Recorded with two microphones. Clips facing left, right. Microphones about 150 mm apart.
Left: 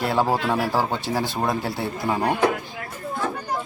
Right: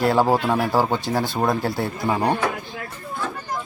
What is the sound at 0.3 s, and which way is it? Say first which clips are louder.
Speech: right 3 dB; 15° right (ahead or behind).